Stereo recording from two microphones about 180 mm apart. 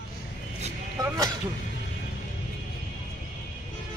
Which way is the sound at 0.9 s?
20° right (ahead or behind).